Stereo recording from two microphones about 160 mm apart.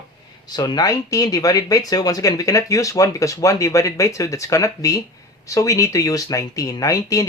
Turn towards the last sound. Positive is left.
turn(degrees=20)  # may be behind; listen again after turning